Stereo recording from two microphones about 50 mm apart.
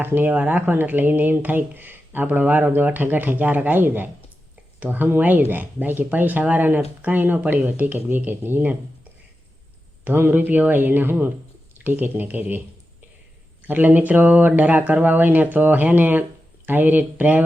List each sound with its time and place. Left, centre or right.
0.0 s speech: right
10.0 s speech: right
13.7 s speech: right